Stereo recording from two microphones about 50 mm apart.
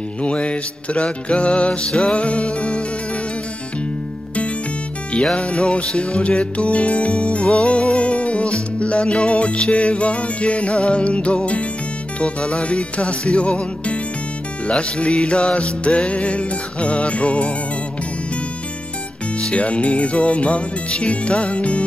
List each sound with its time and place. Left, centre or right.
0.2 s music: left
5.1 s music: left
19.5 s music: left